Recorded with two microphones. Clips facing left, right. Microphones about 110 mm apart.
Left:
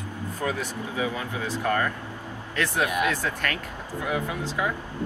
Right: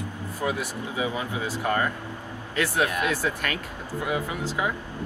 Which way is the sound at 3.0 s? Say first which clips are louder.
Even; 10° right (ahead or behind).